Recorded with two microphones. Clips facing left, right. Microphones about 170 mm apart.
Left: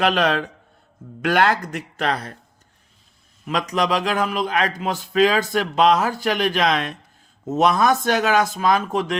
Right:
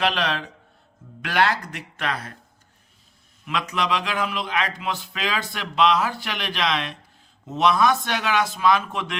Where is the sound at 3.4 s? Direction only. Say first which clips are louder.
Left 4 dB; 40° left (ahead or behind).